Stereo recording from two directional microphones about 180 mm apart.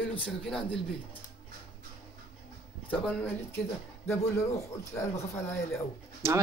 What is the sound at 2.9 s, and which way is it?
Speech, 10° left (ahead or behind).